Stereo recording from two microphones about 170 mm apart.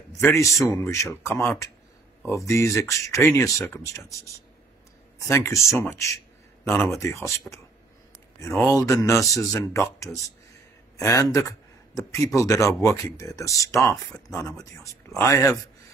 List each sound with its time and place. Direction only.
0.1 s speech: 15° left (ahead or behind)
5.3 s a man's voice: 15° left (ahead or behind)